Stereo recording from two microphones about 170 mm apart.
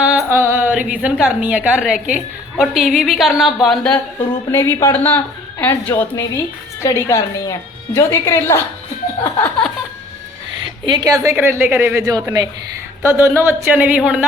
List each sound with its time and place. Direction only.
0.0 s a woman's voice: 10° right (ahead or behind)
4.5 s a woman's voice: 15° left (ahead or behind)
9.4 s a sound: 5° left (ahead or behind)
10.8 s a woman's voice: 25° right (ahead or behind); by 14.3 s 10° right (ahead or behind)